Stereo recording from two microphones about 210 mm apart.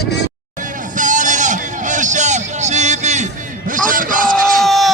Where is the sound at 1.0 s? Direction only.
35° right (ahead or behind).